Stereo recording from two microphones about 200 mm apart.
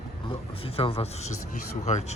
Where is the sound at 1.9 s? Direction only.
35° left (ahead or behind).